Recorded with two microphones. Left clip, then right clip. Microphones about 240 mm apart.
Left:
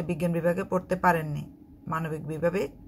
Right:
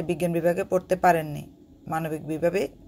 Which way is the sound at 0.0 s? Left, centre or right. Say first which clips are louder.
Right 3 dB; centre.